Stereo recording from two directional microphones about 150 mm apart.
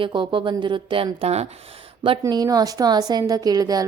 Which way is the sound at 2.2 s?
25° right (ahead or behind).